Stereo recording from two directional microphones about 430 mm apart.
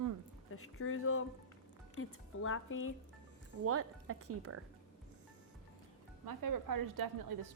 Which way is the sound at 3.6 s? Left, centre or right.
Right.